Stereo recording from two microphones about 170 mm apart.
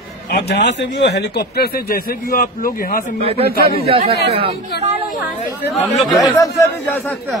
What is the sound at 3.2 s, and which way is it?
Speech, 35° right (ahead or behind).